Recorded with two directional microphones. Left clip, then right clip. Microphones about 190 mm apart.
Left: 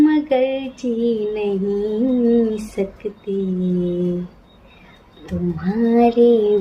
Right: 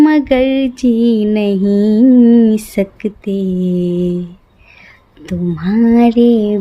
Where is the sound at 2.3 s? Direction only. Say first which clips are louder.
Right 6 dB; 60° right (ahead or behind).